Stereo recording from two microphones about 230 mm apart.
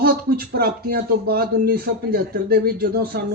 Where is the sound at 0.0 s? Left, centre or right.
Right.